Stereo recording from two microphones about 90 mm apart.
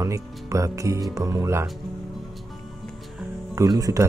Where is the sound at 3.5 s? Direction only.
40° right (ahead or behind).